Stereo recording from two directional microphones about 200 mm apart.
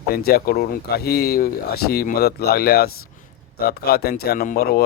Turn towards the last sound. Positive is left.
turn(degrees=50)  # may be behind; listen again after turning